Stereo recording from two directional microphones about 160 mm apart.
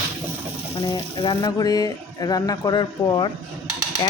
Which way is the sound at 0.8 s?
30° left (ahead or behind).